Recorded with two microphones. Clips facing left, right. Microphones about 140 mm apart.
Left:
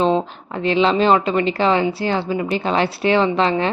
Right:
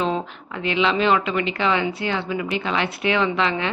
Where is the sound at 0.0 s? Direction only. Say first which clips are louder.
Left 6 dB; 30° left (ahead or behind).